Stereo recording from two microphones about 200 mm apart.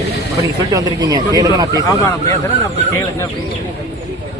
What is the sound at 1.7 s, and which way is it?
Speech, 15° left (ahead or behind).